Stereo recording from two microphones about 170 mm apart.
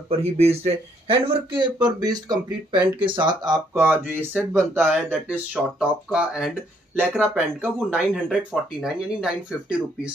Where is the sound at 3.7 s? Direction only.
10° right (ahead or behind).